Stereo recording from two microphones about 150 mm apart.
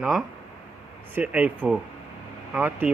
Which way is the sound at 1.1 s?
10° right (ahead or behind).